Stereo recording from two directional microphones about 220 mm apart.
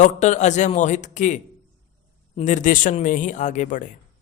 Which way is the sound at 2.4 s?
35° left (ahead or behind).